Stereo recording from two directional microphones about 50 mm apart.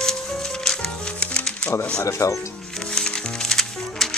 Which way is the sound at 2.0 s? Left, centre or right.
Left.